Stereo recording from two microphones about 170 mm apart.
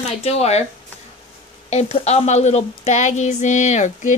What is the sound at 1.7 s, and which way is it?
Speech, 40° left (ahead or behind).